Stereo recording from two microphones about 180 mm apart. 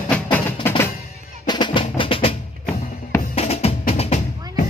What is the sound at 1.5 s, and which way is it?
Percussion, 25° left (ahead or behind).